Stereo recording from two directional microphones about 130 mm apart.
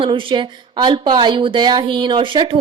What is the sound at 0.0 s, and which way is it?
Speech, 40° right (ahead or behind).